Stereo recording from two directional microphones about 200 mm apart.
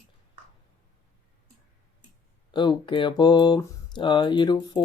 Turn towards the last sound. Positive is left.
turn(degrees=20)  # may be behind; listen again after turning